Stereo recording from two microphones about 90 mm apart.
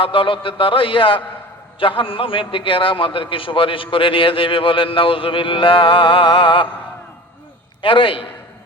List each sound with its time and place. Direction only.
0.0 s a man's voice: 75° left (ahead or behind)
7.8 s a man's voice: 75° left (ahead or behind)